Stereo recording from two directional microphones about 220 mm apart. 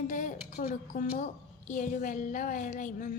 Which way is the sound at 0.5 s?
35° left (ahead or behind).